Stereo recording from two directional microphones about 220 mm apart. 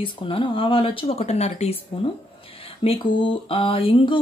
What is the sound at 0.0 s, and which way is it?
Speech, 25° left (ahead or behind).